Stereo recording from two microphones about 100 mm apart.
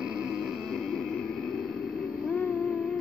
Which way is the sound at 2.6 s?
5° left (ahead or behind).